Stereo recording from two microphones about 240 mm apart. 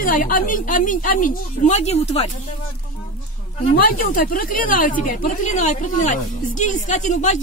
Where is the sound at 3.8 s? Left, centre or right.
Left.